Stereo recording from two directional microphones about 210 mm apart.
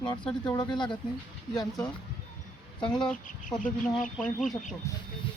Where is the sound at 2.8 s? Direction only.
20° left (ahead or behind).